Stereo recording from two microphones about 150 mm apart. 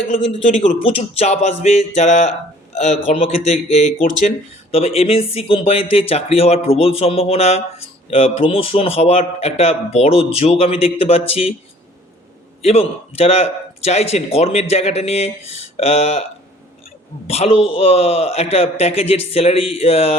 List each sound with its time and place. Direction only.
0.3 s speech: 40° left (ahead or behind)
12.6 s speech: 40° left (ahead or behind)
17.2 s speech: 45° left (ahead or behind)